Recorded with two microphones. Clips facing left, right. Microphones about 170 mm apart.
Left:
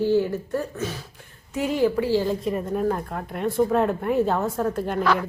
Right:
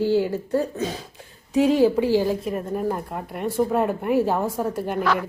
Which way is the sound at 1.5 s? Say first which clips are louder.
Right 5 dB; 20° right (ahead or behind).